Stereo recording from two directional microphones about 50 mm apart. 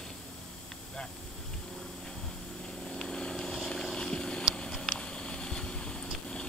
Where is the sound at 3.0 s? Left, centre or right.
Centre.